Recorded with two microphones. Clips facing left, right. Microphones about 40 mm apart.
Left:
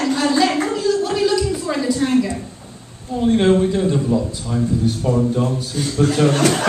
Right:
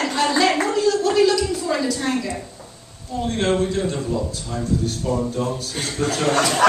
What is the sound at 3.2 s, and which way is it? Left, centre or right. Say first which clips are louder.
A man's voice: left 6 dB; centre.